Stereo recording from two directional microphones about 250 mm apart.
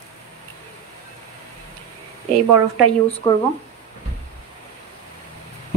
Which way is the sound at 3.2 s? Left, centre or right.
Centre.